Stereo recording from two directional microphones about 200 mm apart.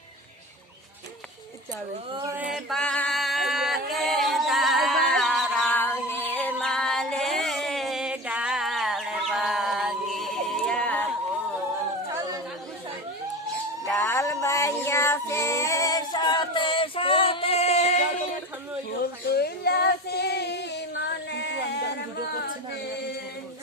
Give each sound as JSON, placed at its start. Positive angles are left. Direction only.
{"t": 2.1, "sound": "male singing", "side_deg": -15}
{"t": 6.6, "sound": "music", "side_deg": 5}
{"t": 12.0, "sound": "a sound", "side_deg": -15}
{"t": 13.8, "sound": "female singing", "side_deg": 10}
{"t": 19.3, "sound": "female singing", "side_deg": 50}